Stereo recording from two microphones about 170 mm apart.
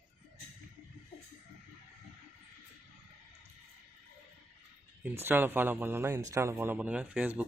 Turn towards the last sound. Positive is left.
turn(degrees=-5)  # may be behind; listen again after turning